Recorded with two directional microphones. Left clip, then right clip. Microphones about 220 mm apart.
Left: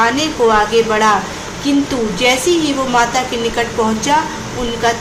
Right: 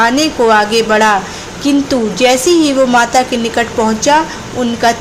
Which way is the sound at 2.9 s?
30° right (ahead or behind).